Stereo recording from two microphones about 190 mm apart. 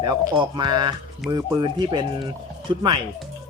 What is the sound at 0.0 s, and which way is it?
Speech, 20° right (ahead or behind).